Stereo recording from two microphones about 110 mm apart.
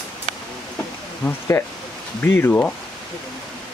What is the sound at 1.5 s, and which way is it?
Speech, 20° left (ahead or behind).